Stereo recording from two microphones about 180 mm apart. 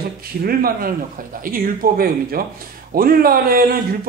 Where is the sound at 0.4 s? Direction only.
55° right (ahead or behind).